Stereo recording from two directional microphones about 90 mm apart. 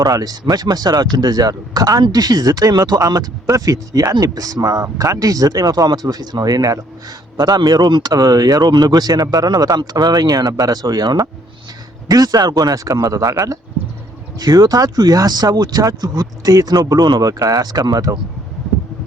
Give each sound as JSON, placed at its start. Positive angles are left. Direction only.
{"t": 0.0, "sound": "speech", "side_deg": -45}
{"t": 14.3, "sound": "speech", "side_deg": -45}